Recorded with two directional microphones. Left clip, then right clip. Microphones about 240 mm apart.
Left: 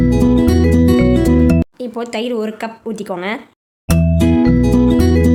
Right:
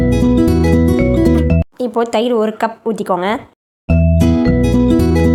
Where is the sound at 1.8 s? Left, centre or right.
Centre.